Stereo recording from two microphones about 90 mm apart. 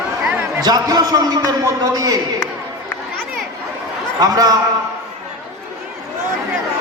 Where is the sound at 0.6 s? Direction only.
45° right (ahead or behind).